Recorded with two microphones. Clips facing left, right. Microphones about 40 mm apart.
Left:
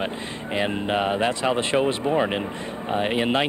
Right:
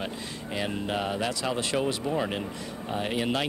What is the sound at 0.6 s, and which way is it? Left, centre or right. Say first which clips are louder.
Speech: left 6 dB; left.